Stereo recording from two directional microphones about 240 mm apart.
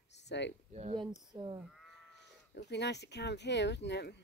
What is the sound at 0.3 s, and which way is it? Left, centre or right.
Speech, left.